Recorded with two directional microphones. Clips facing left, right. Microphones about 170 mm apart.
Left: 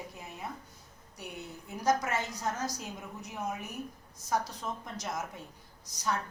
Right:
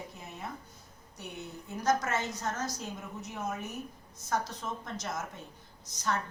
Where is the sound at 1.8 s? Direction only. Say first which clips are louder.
Even; 15° left (ahead or behind).